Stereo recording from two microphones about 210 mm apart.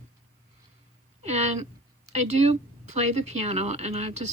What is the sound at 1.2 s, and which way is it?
Speech, 30° right (ahead or behind).